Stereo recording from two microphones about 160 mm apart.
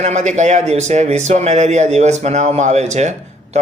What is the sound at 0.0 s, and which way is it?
Speech, 45° right (ahead or behind).